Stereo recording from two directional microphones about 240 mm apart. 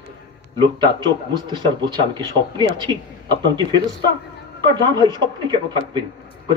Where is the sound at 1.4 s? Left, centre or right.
Centre.